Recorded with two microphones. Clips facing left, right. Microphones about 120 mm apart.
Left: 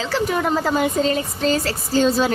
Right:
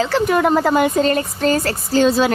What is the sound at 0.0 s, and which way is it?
Speech, 60° right (ahead or behind).